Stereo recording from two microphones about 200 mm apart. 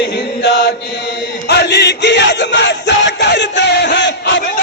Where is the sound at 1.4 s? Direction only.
55° left (ahead or behind).